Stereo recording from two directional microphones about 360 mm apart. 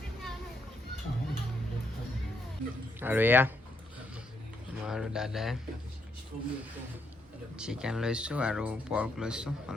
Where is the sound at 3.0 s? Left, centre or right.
Centre.